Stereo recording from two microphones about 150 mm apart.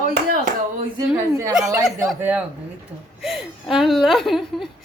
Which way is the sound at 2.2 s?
10° right (ahead or behind).